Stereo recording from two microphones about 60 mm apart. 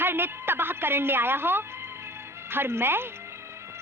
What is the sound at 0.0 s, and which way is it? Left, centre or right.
A woman's voice, right.